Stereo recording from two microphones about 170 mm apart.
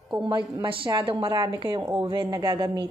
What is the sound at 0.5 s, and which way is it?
A woman's voice, 30° right (ahead or behind).